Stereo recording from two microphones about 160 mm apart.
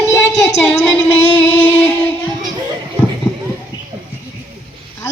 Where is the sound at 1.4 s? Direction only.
10° left (ahead or behind).